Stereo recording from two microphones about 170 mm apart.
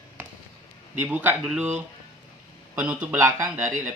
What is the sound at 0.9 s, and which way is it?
Speech, 10° right (ahead or behind).